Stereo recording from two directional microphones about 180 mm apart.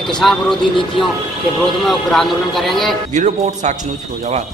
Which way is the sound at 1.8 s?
Centre (ahead or behind).